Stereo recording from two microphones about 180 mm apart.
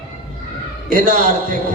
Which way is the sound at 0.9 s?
50° right (ahead or behind).